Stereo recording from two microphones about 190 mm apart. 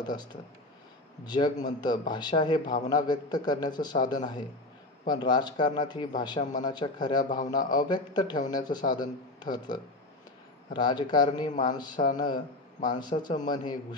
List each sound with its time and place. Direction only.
0.0 s a man's voice: 20° left (ahead or behind)